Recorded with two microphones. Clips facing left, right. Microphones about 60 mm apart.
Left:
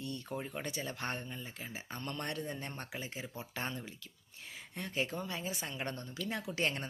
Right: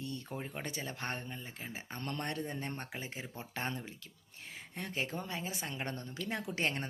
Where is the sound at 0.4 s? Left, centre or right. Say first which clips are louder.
Left 1 dB; right.